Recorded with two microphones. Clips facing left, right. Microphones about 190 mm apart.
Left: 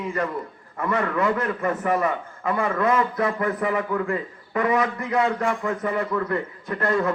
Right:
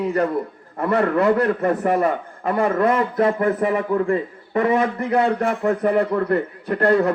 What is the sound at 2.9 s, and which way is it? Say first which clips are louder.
A man's voice: right 4 dB; 35° right (ahead or behind).